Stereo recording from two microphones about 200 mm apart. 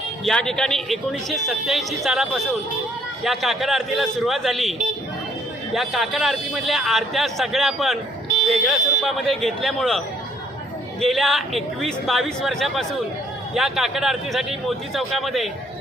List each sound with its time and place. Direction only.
0.3 s speech: 5° left (ahead or behind)
5.7 s speech: centre (ahead or behind)
11.0 s speech: centre (ahead or behind)